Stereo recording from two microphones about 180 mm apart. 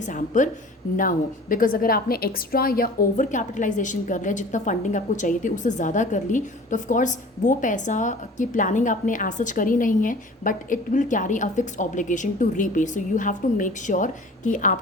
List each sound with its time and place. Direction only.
0.0 s a woman's voice: 45° left (ahead or behind)